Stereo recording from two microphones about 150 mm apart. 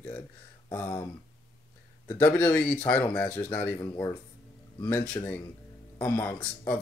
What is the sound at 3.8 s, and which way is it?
Speech, 25° left (ahead or behind).